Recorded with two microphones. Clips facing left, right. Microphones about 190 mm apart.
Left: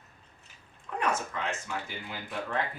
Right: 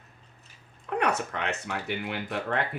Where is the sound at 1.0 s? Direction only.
65° right (ahead or behind).